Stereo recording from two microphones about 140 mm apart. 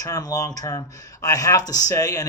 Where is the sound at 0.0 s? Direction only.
25° left (ahead or behind).